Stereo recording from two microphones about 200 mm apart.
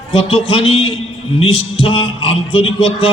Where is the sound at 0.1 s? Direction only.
25° left (ahead or behind).